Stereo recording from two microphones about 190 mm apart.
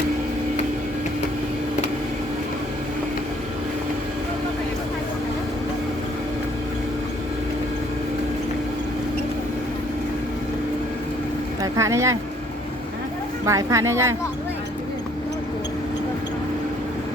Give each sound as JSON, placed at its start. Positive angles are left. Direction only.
{"t": 11.6, "sound": "speech", "side_deg": -15}
{"t": 13.4, "sound": "speech", "side_deg": -15}